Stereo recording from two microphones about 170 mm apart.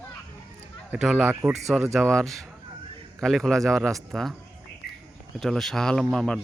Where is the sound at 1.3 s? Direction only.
15° right (ahead or behind).